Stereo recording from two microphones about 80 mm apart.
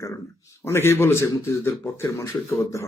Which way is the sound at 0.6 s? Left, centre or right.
Left.